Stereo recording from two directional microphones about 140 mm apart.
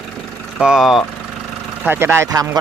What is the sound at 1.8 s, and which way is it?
Speech, 15° right (ahead or behind).